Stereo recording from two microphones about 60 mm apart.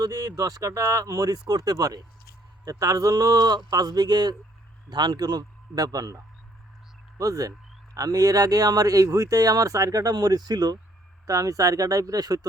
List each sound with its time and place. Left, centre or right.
0.0 s speech: right
2.6 s speech: right
5.2 s speech: right
11.3 s speech: right